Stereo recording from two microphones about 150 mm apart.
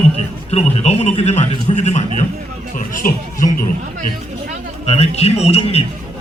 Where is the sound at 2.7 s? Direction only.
60° left (ahead or behind).